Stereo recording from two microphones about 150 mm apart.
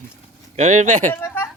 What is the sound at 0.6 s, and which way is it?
Speech, 55° right (ahead or behind).